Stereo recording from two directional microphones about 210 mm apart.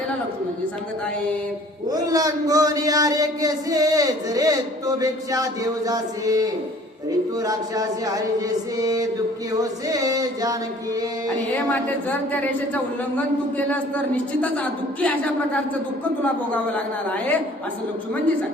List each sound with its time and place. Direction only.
1.9 s a man's voice: 15° right (ahead or behind)
11.5 s speech: 5° left (ahead or behind)
14.4 s speech: 5° left (ahead or behind)